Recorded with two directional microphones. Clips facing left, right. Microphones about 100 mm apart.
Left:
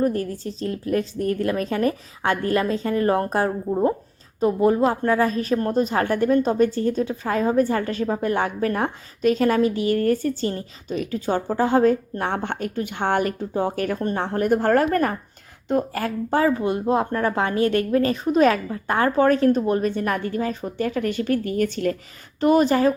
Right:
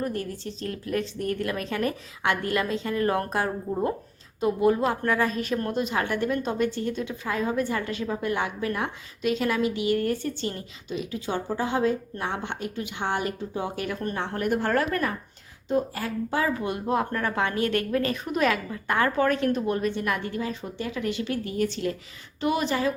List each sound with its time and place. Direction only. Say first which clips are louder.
0.0 s a woman's voice: left 7 dB; 35° left (ahead or behind)
15.7 s a woman's voice: left 3 dB; 55° left (ahead or behind)